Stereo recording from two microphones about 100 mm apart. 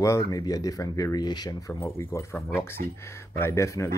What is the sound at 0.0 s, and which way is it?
Speech, 30° left (ahead or behind).